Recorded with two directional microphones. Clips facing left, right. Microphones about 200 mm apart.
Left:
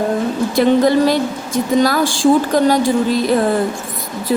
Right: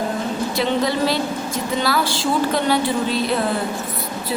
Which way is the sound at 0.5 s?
50° left (ahead or behind).